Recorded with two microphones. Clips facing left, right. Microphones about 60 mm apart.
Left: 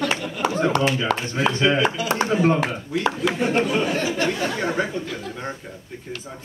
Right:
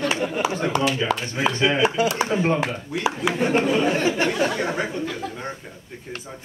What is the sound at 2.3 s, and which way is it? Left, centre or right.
Speech, right.